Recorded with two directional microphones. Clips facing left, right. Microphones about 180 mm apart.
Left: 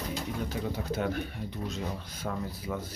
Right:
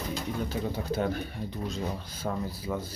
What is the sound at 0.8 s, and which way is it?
Speech, 30° right (ahead or behind).